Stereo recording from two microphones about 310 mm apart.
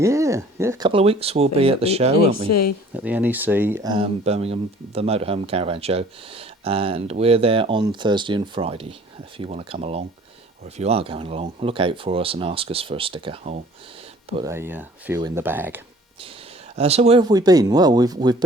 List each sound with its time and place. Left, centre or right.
0.0 s speech: centre
2.5 s speech: left
2.9 s speech: centre
16.7 s speech: centre